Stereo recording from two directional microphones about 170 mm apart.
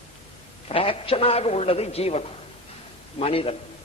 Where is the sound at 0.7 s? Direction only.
35° left (ahead or behind).